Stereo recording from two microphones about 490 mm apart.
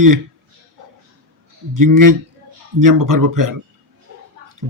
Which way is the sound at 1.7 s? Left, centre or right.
Right.